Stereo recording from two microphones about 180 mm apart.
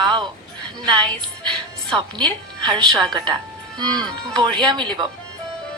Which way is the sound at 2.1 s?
25° right (ahead or behind).